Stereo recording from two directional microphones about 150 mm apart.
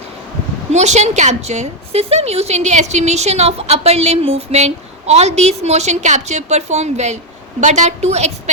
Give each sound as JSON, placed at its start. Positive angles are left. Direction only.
{"t": 0.7, "sound": "a woman's voice", "side_deg": -50}